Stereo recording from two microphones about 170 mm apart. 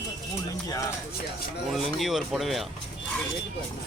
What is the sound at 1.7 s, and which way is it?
Speech, centre (ahead or behind).